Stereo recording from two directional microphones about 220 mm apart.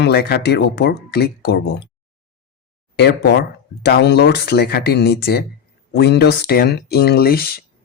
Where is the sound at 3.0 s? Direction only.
50° left (ahead or behind).